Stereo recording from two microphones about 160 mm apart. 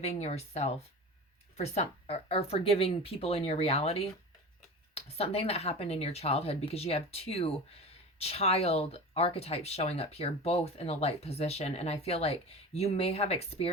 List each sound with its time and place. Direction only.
0.0 s speech: 40° left (ahead or behind)